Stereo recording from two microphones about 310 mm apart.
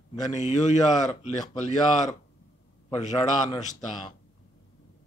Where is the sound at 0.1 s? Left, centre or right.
Centre.